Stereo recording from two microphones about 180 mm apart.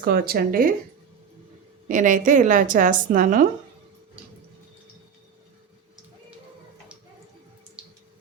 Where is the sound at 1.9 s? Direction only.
45° right (ahead or behind).